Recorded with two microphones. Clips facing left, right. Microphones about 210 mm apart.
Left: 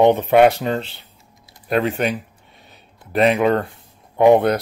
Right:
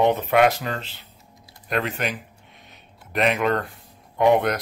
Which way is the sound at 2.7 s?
35° left (ahead or behind).